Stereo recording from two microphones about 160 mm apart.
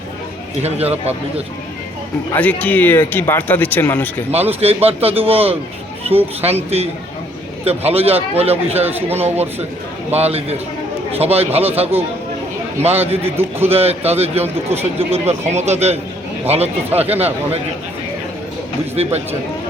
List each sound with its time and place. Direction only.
0.6 s speech: 40° right (ahead or behind)
2.3 s speech: 10° left (ahead or behind)
4.3 s speech: 40° right (ahead or behind)
10.2 s speech: 40° right (ahead or behind)
18.9 s speech: 40° right (ahead or behind)